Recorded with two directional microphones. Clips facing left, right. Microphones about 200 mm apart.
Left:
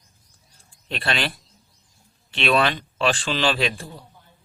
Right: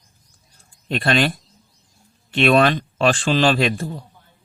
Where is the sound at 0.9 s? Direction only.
45° right (ahead or behind).